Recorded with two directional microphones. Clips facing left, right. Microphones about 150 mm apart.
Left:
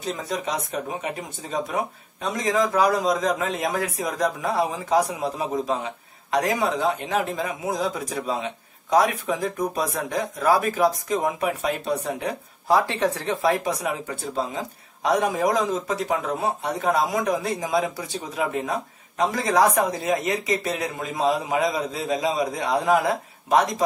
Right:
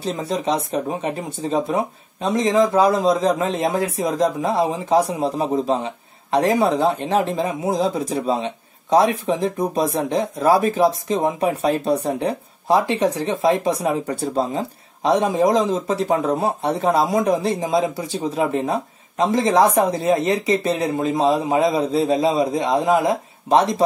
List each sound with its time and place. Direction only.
0.0 s speech: 30° right (ahead or behind)